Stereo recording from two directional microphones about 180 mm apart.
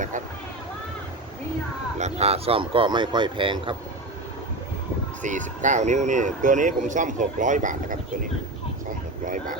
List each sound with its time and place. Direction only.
2.0 s speech: 35° right (ahead or behind)
5.2 s speech: 45° right (ahead or behind)
9.2 s speech: 45° right (ahead or behind)